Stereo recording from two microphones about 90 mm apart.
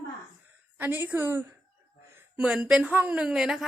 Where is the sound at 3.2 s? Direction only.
5° right (ahead or behind).